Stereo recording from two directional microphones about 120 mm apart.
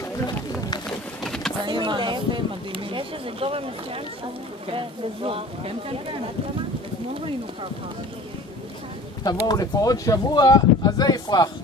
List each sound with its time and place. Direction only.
1.2 s vehicle: 5° left (ahead or behind)
1.7 s speech: 40° right (ahead or behind)
9.2 s speech: 35° left (ahead or behind)